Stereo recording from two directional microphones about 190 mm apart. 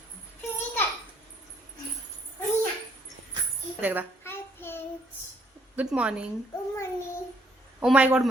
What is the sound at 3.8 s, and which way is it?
Speech, 10° right (ahead or behind).